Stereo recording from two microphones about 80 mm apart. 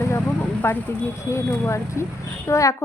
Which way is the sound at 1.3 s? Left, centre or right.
Left.